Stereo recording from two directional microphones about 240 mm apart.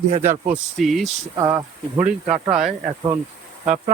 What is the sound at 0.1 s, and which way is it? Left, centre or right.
Speech, right.